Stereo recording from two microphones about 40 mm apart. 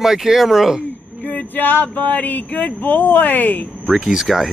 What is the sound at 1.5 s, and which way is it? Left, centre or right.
Speech, left.